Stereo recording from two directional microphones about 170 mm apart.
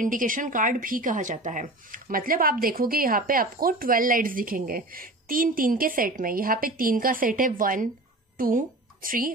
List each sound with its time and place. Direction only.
0.0 s a woman's voice: 50° right (ahead or behind)